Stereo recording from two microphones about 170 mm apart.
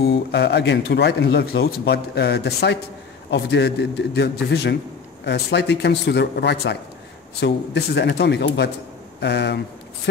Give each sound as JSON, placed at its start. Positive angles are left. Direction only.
{"t": 0.1, "sound": "speech", "side_deg": 80}
{"t": 5.2, "sound": "speech", "side_deg": 85}
{"t": 9.2, "sound": "speech", "side_deg": 80}